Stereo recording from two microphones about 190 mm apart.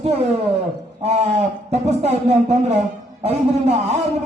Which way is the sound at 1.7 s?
35° right (ahead or behind).